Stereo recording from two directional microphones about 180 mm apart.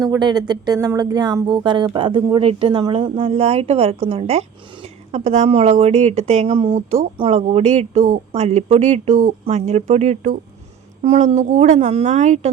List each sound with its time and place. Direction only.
0.0 s speech: 25° right (ahead or behind); by 12.5 s 40° right (ahead or behind)